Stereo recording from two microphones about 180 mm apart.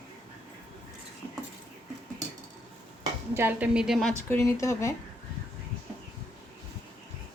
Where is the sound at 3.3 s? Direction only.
10° right (ahead or behind).